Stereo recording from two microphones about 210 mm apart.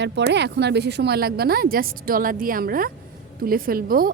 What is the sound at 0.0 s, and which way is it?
A woman's voice, 55° right (ahead or behind).